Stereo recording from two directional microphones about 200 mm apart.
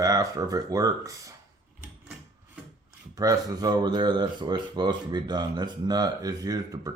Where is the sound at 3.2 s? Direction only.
20° right (ahead or behind).